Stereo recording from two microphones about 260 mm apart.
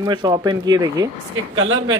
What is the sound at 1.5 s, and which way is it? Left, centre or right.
Speech, right.